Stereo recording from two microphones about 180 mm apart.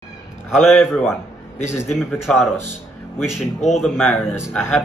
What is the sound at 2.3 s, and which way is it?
Speech, 5° left (ahead or behind).